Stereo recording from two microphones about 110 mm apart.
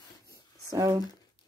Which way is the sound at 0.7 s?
30° right (ahead or behind).